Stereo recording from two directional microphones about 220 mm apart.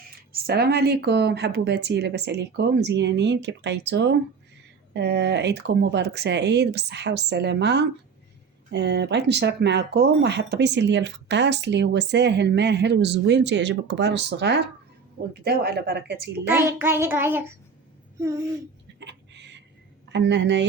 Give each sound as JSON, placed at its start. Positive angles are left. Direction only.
{"t": 0.4, "sound": "speech", "side_deg": -45}
{"t": 16.5, "sound": "child singing", "side_deg": -10}
{"t": 18.9, "sound": "a sound", "side_deg": -50}
{"t": 20.1, "sound": "a woman's voice", "side_deg": -50}